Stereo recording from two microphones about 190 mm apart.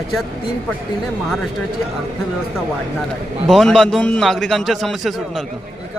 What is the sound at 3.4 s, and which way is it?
A man's voice, centre (ahead or behind).